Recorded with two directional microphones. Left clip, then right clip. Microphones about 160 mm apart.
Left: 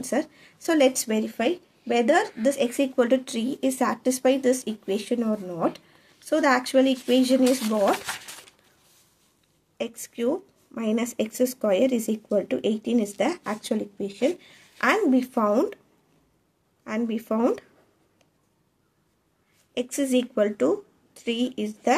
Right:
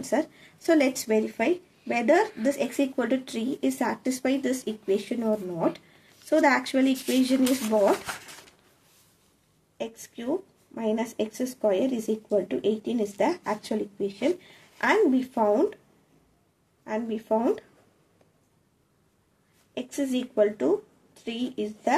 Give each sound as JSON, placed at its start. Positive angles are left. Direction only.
{"t": 0.0, "sound": "speech", "side_deg": 35}
{"t": 9.8, "sound": "speech", "side_deg": 50}
{"t": 16.8, "sound": "speech", "side_deg": 55}
{"t": 19.7, "sound": "a woman's voice", "side_deg": 50}